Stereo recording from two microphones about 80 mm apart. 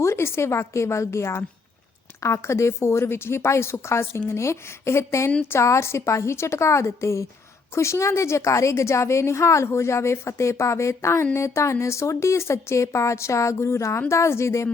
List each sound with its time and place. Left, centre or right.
0.0 s a woman's voice: left